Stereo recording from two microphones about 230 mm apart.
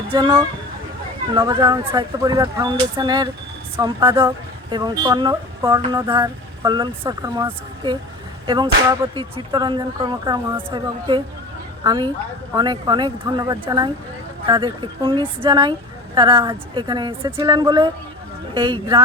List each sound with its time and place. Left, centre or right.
0.1 s speech: centre